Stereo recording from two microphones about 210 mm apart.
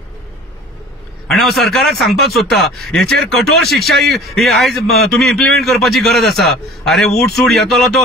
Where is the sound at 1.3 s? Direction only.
Centre (ahead or behind).